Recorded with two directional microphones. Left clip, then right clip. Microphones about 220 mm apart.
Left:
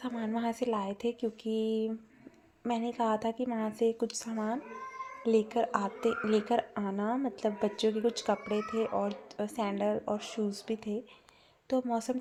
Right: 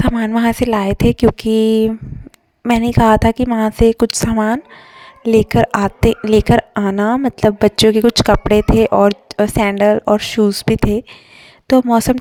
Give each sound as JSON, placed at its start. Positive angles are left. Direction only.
{"t": 0.0, "sound": "a woman's voice", "side_deg": -50}